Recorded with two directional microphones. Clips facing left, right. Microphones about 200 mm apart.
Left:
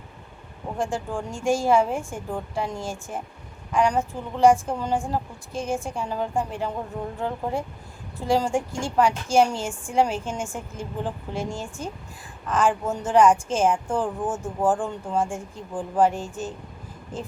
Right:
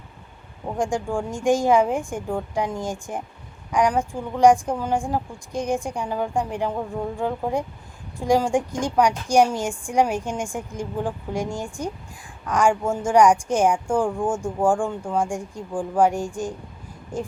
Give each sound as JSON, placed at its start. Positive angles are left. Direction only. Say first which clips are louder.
{"t": 0.8, "sound": "a woman's voice", "louder": "right 4 dB", "side_deg": -15}